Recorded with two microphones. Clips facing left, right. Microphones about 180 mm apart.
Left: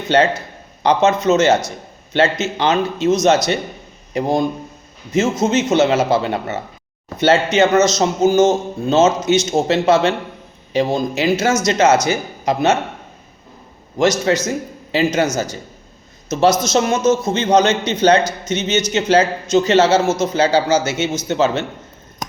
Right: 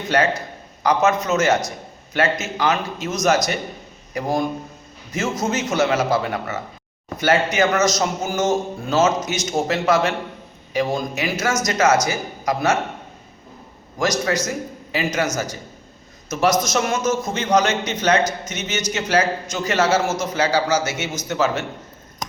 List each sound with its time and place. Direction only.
0.1 s a man's voice: 25° left (ahead or behind)
14.0 s a man's voice: 25° left (ahead or behind)